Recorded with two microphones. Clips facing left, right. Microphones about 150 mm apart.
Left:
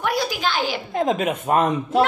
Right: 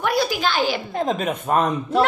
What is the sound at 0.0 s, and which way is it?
Speech, 15° left (ahead or behind).